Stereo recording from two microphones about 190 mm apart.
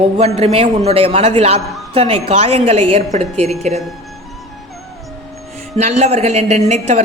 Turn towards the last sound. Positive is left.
turn(degrees=-35)  # may be behind; listen again after turning